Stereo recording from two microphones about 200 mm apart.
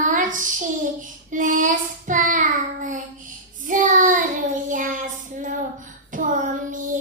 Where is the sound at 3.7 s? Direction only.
40° right (ahead or behind).